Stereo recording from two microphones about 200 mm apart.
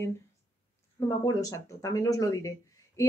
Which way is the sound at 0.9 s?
15° left (ahead or behind).